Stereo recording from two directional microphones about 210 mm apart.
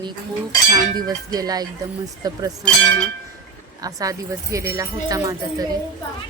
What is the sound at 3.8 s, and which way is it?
Speech, 15° right (ahead or behind).